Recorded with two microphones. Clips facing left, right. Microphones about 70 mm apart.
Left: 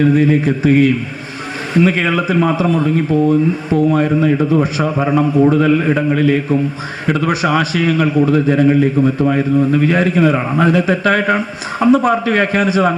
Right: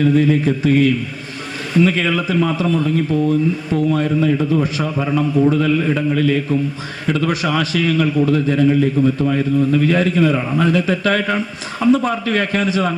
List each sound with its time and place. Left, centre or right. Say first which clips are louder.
0.2 s a man's voice: left 2 dB; left